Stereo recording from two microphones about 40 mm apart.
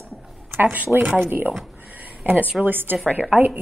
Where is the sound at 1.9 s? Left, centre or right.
Right.